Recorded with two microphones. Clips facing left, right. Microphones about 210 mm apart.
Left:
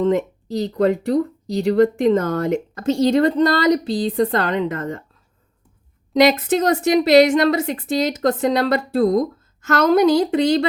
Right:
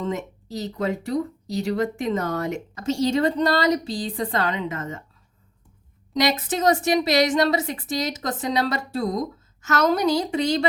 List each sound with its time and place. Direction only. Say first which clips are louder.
0.0 s speech: left 10 dB; 60° left (ahead or behind)
6.3 s speech: left 3 dB; 60° left (ahead or behind)